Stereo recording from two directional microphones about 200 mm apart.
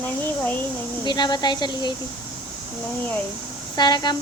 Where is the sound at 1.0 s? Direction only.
20° left (ahead or behind).